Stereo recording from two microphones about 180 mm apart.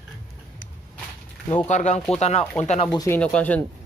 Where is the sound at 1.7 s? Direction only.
40° left (ahead or behind).